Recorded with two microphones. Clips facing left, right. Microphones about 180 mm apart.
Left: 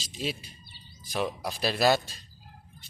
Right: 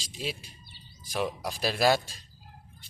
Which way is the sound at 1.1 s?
10° right (ahead or behind).